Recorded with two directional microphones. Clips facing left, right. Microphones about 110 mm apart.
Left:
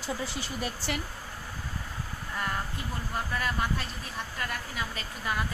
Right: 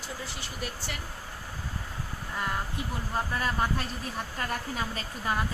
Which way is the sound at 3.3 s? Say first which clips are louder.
Right 1 dB; 30° right (ahead or behind).